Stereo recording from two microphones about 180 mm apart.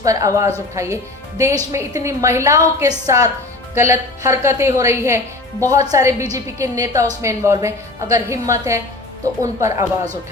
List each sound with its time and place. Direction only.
0.0 s a woman's voice: 20° right (ahead or behind)